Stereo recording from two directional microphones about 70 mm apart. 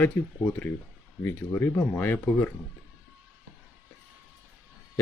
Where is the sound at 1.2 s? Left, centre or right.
Left.